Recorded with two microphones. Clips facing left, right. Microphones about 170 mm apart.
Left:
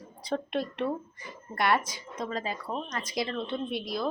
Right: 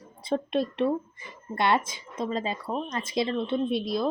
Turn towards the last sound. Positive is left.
turn(degrees=-25)  # may be behind; listen again after turning